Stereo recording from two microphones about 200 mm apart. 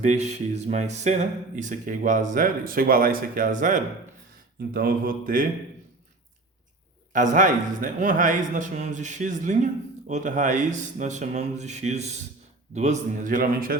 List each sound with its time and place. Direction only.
0.0 s speech: 35° right (ahead or behind)
4.7 s mantra: 45° right (ahead or behind)
7.1 s speech: 40° right (ahead or behind)